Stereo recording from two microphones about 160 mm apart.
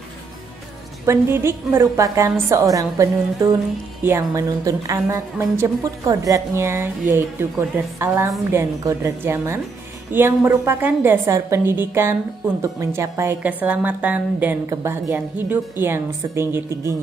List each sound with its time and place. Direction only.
1.0 s a woman's voice: 15° right (ahead or behind)